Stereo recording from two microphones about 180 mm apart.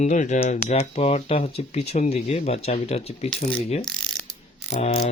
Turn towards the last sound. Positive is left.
turn(degrees=35)  # may be behind; listen again after turning